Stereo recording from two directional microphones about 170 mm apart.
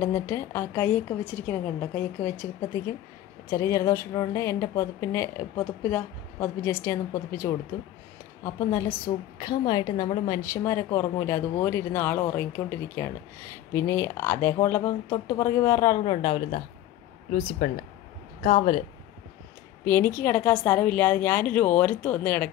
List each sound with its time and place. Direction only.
0.0 s a woman's voice: 15° left (ahead or behind)
3.4 s a woman's voice: 15° left (ahead or behind)
8.5 s a woman's voice: 20° left (ahead or behind)
16.0 s speech: 30° left (ahead or behind)
17.6 s speech: 55° left (ahead or behind)
18.4 s speech: 40° left (ahead or behind)
19.8 s a woman's voice: 15° left (ahead or behind)